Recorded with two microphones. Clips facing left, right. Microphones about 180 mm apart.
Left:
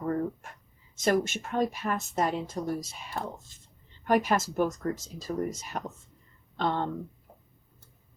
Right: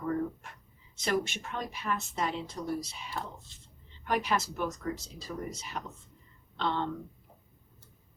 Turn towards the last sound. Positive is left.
turn(degrees=45)  # may be behind; listen again after turning